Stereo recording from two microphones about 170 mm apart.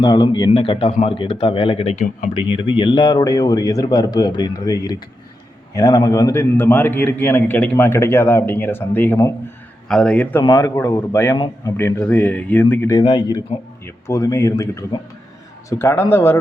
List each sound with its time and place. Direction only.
0.0 s a man's voice: 25° left (ahead or behind); by 10.4 s 5° left (ahead or behind)
10.4 s speech: 25° left (ahead or behind)
10.8 s a man's voice: 15° left (ahead or behind)
13.0 s a man's voice: 25° left (ahead or behind)